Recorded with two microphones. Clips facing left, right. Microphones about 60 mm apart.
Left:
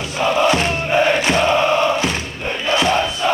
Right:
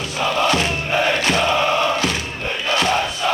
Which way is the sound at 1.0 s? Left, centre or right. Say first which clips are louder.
Left 1 dB; left.